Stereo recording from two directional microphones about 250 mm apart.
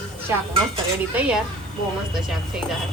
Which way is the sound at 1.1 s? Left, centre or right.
Centre.